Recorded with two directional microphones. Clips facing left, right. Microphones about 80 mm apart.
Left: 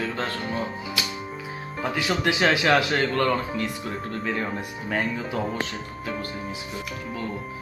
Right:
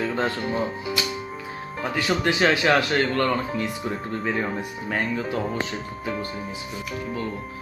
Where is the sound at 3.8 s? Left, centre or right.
Centre.